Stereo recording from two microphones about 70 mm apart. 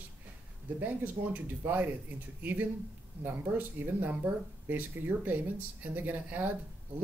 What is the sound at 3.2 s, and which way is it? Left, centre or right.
Speech, right.